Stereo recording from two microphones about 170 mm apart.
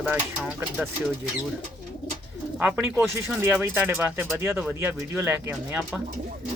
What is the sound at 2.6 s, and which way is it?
Speech, 5° right (ahead or behind).